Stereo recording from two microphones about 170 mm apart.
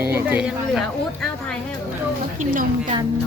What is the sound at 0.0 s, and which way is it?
Speech, 10° right (ahead or behind).